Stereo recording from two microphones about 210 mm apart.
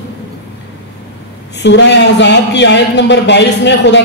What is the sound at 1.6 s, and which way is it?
Speech, 55° left (ahead or behind).